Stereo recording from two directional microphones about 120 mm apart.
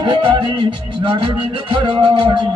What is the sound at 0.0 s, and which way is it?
Music, 40° right (ahead or behind).